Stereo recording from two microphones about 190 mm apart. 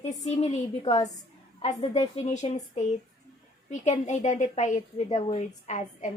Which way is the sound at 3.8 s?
40° left (ahead or behind).